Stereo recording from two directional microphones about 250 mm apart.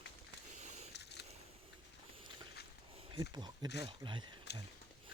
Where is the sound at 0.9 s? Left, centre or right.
Left.